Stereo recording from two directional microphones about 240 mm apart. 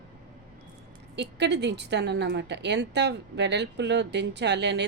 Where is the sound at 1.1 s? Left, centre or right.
Right.